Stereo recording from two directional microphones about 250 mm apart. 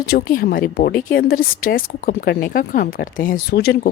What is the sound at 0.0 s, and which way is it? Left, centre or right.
Speech, left.